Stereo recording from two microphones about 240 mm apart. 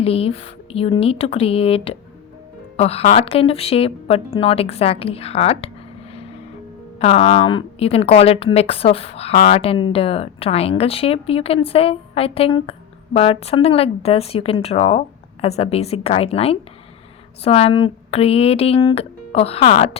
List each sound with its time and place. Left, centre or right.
0.0 s speech: left